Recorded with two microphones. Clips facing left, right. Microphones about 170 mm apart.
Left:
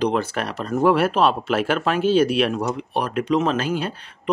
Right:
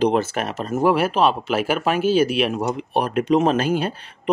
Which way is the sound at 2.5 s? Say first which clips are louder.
Right 2 dB; 20° right (ahead or behind).